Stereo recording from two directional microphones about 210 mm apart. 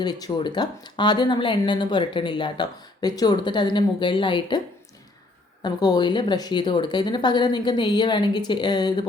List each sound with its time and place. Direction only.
0.0 s speech: 20° left (ahead or behind)
5.6 s speech: 20° left (ahead or behind)